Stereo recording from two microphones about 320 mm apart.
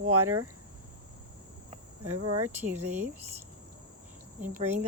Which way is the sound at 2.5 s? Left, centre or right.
Centre.